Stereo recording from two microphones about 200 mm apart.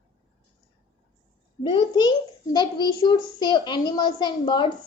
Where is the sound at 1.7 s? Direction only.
20° left (ahead or behind).